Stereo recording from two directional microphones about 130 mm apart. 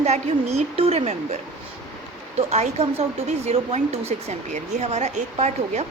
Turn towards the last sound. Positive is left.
turn(degrees=-60)  # may be behind; listen again after turning